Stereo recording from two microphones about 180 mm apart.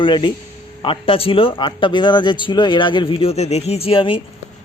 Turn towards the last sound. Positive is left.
turn(degrees=30)  # may be behind; listen again after turning